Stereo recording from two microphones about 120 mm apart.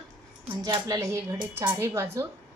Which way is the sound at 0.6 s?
30° right (ahead or behind).